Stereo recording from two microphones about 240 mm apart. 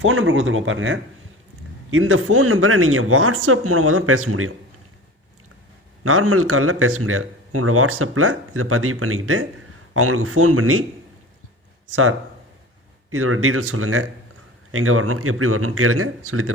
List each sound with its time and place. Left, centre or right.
0.0 s speech: right
6.0 s speech: right
13.1 s speech: right